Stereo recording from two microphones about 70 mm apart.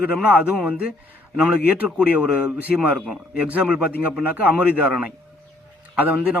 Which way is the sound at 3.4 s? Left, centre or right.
Centre.